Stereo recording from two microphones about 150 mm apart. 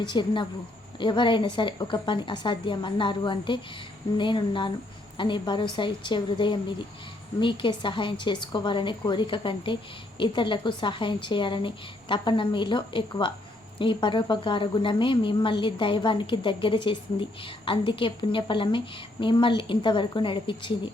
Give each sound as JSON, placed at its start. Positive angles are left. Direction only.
{"t": 0.0, "sound": "a woman's voice", "side_deg": 30}